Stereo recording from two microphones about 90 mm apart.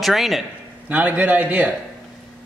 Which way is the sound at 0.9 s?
15° right (ahead or behind).